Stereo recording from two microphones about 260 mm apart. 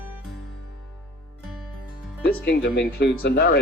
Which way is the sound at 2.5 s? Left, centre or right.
Left.